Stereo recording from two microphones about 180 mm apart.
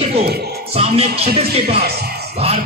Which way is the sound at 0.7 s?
35° right (ahead or behind).